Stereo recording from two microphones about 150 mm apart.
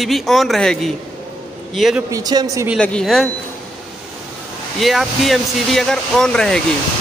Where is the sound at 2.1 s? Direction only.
25° right (ahead or behind).